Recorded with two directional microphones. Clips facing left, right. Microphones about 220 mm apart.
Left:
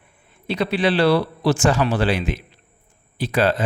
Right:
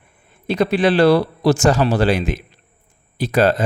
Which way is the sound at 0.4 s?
50° right (ahead or behind).